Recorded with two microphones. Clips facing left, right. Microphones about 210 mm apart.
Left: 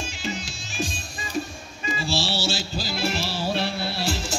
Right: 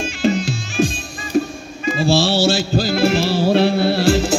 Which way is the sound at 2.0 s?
55° right (ahead or behind).